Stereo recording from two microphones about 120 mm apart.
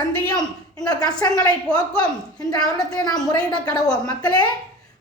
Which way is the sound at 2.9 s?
35° left (ahead or behind).